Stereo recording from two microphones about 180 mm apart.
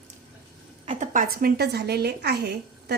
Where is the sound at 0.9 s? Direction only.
40° right (ahead or behind).